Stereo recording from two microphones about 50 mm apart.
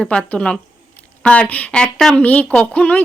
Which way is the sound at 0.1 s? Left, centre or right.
Left.